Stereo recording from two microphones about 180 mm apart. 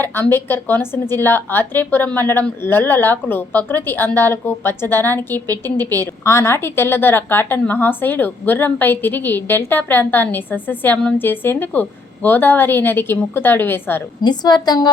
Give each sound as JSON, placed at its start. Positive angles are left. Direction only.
{"t": 0.0, "sound": "a woman's voice", "side_deg": 10}
{"t": 14.2, "sound": "a woman's voice", "side_deg": 25}